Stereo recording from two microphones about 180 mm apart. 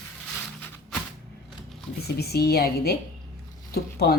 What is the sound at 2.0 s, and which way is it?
Speech, 65° left (ahead or behind).